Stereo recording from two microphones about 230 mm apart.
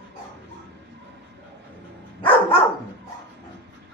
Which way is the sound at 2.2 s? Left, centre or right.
Left.